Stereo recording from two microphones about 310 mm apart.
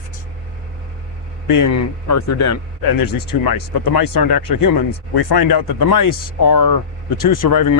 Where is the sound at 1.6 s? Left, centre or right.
Left.